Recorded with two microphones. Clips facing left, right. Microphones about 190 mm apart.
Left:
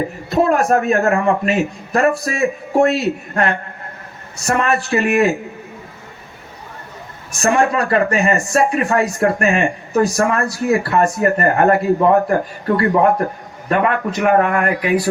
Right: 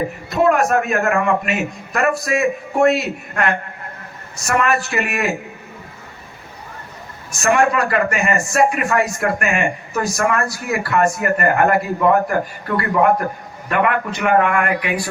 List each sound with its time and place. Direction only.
0.3 s speech: 30° left (ahead or behind)
7.3 s speech: 35° left (ahead or behind)